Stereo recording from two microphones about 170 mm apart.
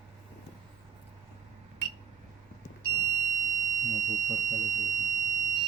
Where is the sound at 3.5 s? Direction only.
45° right (ahead or behind).